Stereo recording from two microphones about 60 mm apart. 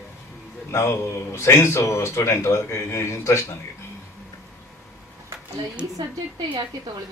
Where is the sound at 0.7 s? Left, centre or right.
Left.